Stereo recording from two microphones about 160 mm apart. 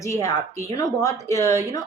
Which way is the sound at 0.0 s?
20° left (ahead or behind).